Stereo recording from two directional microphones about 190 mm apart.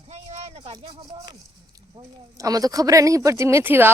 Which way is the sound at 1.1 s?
20° right (ahead or behind).